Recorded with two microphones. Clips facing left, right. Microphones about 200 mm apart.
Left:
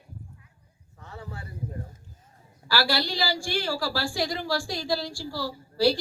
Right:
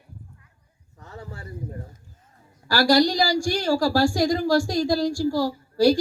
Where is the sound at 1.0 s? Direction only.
40° right (ahead or behind).